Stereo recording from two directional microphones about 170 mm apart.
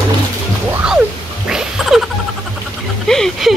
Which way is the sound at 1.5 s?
5° right (ahead or behind).